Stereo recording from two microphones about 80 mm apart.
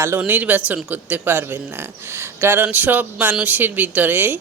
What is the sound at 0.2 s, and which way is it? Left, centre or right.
Speech, centre.